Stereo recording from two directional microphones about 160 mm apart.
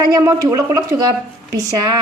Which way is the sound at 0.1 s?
20° right (ahead or behind).